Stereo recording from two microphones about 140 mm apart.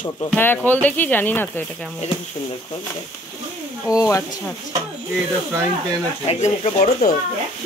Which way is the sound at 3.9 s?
25° left (ahead or behind).